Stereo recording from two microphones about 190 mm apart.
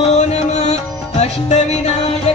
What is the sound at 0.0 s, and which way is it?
Music, 35° left (ahead or behind).